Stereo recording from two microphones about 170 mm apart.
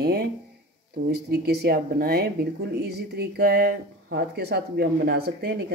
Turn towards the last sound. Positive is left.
turn(degrees=-70)  # may be behind; listen again after turning